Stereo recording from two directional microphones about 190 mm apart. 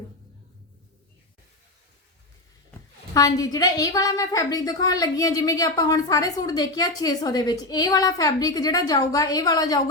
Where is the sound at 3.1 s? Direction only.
20° left (ahead or behind).